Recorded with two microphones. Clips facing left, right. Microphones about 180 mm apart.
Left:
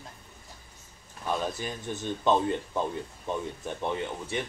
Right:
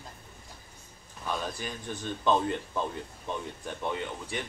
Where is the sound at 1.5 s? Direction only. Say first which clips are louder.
Left 2 dB; 20° left (ahead or behind).